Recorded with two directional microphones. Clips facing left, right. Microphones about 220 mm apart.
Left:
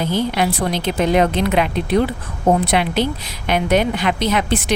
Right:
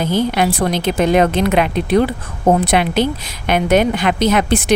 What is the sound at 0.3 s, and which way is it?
A woman's voice, 50° right (ahead or behind).